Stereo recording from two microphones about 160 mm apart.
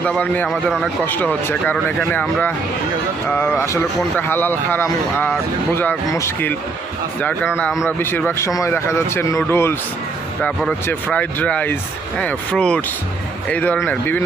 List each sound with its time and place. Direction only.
0.0 s speech: 10° left (ahead or behind)